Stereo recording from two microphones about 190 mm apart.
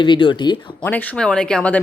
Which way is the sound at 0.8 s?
10° left (ahead or behind).